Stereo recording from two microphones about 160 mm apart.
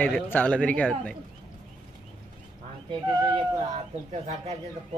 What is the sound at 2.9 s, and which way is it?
Speech, 30° right (ahead or behind).